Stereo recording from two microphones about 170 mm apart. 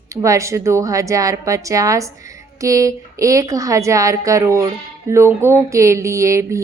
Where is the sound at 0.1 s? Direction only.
15° right (ahead or behind).